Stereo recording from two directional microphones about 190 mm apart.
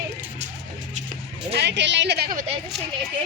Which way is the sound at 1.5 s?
65° right (ahead or behind).